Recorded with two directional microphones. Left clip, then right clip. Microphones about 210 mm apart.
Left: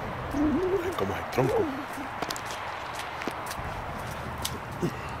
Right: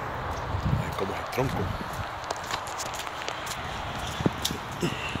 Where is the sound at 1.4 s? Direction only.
25° left (ahead or behind).